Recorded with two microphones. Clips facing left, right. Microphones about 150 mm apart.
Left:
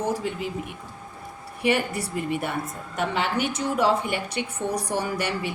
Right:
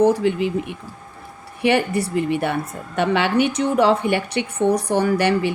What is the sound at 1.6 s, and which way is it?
A woman's voice, 65° right (ahead or behind).